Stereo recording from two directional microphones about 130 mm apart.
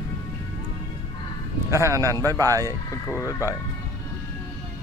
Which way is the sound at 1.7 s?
20° right (ahead or behind).